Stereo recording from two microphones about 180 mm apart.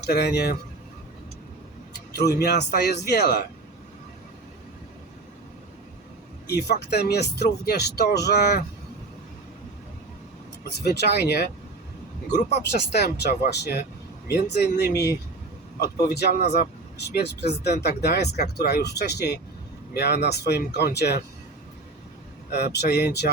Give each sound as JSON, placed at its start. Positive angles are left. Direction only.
{"t": 0.1, "sound": "speech", "side_deg": 65}
{"t": 1.9, "sound": "a sound", "side_deg": 65}
{"t": 2.7, "sound": "speech", "side_deg": 65}
{"t": 6.5, "sound": "speech", "side_deg": 65}
{"t": 10.6, "sound": "speech", "side_deg": 65}
{"t": 12.7, "sound": "speech", "side_deg": 65}
{"t": 22.5, "sound": "speech", "side_deg": 65}